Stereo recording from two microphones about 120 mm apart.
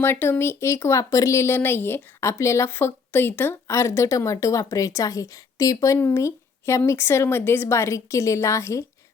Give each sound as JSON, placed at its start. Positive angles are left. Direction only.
{"t": 0.0, "sound": "speech", "side_deg": 20}